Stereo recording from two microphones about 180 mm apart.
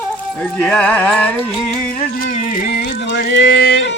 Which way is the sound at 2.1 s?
50° left (ahead or behind).